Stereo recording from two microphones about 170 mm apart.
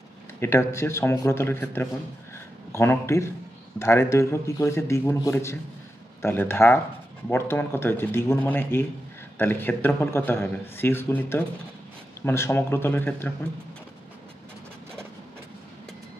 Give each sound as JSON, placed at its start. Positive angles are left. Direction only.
{"t": 0.4, "sound": "a man's voice", "side_deg": 15}
{"t": 2.3, "sound": "a sound", "side_deg": 15}
{"t": 3.8, "sound": "a man's voice", "side_deg": 15}